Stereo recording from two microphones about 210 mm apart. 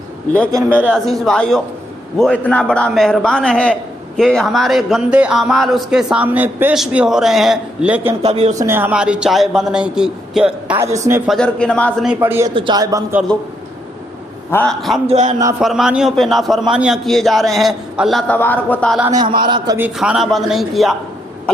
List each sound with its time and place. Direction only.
0.5 s speech: 10° right (ahead or behind)
0.9 s speech: centre (ahead or behind)
8.2 s speech: 30° right (ahead or behind)
8.5 s speech: 10° right (ahead or behind)
11.3 s speech: 5° left (ahead or behind)
12.2 s speech: 10° right (ahead or behind)
14.5 s speech: 5° left (ahead or behind)
15.0 s speech: 35° right (ahead or behind)
15.6 s speech: centre (ahead or behind)
19.0 s a man's voice: 20° right (ahead or behind)
20.0 s speech: centre (ahead or behind)